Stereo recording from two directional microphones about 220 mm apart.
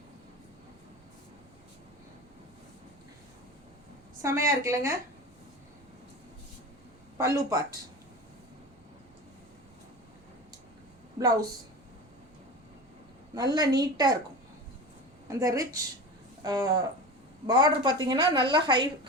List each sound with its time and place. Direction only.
4.2 s a woman's voice: 15° right (ahead or behind)
7.3 s a woman's voice: 15° right (ahead or behind)
11.2 s a woman's voice: 15° right (ahead or behind)
13.3 s a woman's voice: 15° right (ahead or behind)
15.3 s a woman's voice: 15° right (ahead or behind)